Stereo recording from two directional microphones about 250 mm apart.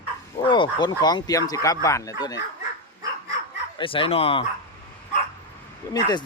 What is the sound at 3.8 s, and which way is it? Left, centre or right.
Speech, left.